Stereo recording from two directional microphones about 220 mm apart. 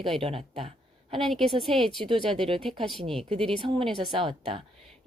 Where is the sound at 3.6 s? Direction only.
25° right (ahead or behind).